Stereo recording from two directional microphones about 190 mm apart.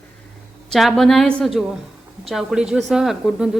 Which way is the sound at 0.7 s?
Centre (ahead or behind).